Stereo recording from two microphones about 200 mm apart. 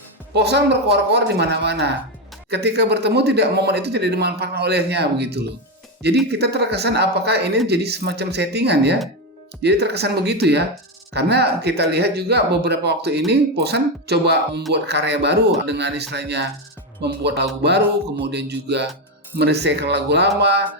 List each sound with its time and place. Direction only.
0.3 s speech: 55° right (ahead or behind)